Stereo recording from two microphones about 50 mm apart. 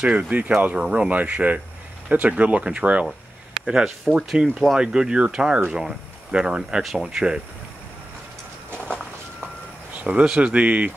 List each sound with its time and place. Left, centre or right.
0.0 s speech: centre
1.1 s speech: right
3.6 s speech: centre
4.7 s speech: centre
6.8 s speech: centre
8.7 s walk: centre
10.0 s speech: centre